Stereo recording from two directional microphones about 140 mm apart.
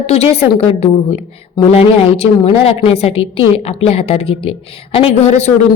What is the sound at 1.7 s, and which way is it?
A woman's voice, 45° left (ahead or behind).